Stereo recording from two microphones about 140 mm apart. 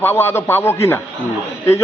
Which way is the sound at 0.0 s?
15° left (ahead or behind).